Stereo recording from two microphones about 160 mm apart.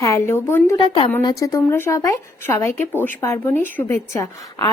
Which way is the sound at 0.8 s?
35° left (ahead or behind).